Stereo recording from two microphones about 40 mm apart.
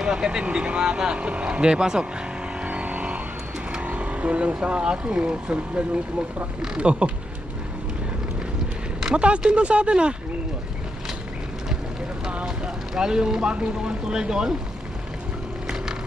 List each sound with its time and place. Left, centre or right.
0.0 s speech: right
2.6 s vehicle: right
3.8 s speech: right
9.0 s speech: right
12.4 s speech: centre